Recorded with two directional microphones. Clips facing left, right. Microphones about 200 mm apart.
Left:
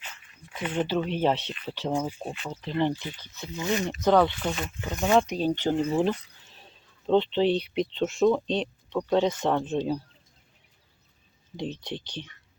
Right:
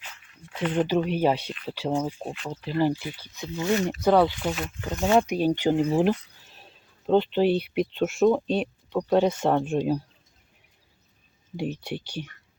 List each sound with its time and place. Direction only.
0.8 s speech: 10° right (ahead or behind)
1.9 s speech: 5° left (ahead or behind); by 3.5 s 10° right (ahead or behind)
3.5 s speech: 15° left (ahead or behind)
4.0 s speech: 5° right (ahead or behind)
5.9 s a sound: 15° right (ahead or behind)
7.1 s speech: 5° right (ahead or behind)
11.5 s speech: 10° right (ahead or behind)